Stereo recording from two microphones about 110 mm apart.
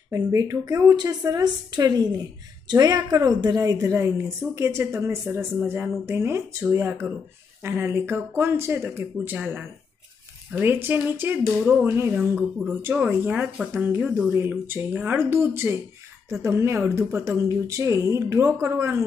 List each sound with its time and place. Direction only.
0.1 s a woman's voice: 30° right (ahead or behind)